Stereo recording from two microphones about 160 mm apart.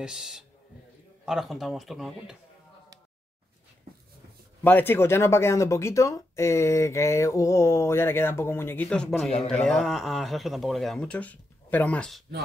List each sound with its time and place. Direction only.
0.0 s a man's voice: 5° right (ahead or behind)
4.6 s a man's voice: 15° left (ahead or behind)